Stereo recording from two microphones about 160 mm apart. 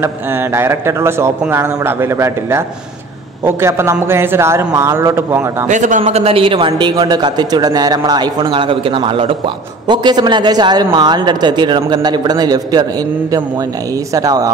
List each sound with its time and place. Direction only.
0.0 s a man's voice: 15° right (ahead or behind)
5.7 s a man's voice: 50° right (ahead or behind); by 12.8 s 25° right (ahead or behind)
14.1 s a man's voice: 20° right (ahead or behind)